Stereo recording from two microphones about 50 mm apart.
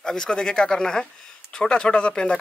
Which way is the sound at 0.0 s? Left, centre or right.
Centre.